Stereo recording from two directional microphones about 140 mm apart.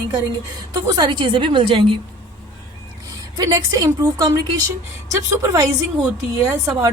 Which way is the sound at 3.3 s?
25° right (ahead or behind).